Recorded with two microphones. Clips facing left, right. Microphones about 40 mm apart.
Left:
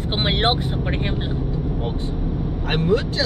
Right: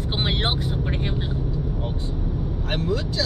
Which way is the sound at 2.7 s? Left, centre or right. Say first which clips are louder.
Left 6 dB; left.